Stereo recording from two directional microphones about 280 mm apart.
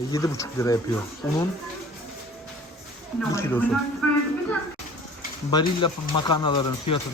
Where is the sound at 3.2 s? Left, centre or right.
Centre.